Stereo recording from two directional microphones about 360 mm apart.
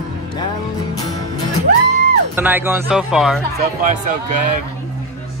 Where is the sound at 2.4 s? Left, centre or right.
Centre.